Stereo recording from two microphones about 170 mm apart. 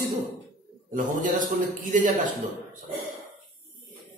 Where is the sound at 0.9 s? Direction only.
50° right (ahead or behind).